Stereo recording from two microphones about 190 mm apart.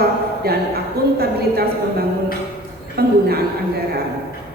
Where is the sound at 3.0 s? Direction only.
55° right (ahead or behind).